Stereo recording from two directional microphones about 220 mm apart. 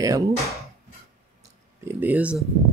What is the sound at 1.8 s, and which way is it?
Speech, 10° right (ahead or behind).